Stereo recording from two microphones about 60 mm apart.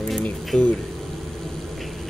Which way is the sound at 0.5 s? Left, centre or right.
Centre.